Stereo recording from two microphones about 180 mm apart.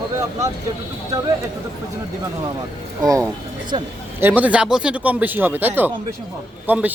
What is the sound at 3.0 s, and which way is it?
Speech, 20° right (ahead or behind).